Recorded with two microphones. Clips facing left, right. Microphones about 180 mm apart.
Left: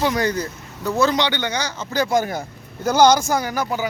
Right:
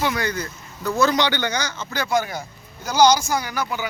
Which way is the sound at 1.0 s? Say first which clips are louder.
Even; 25° left (ahead or behind).